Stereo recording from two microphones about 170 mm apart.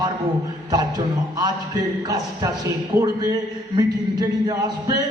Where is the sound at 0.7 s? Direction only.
25° right (ahead or behind).